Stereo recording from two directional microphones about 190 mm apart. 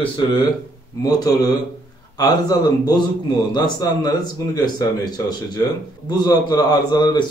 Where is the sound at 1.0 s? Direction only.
20° left (ahead or behind).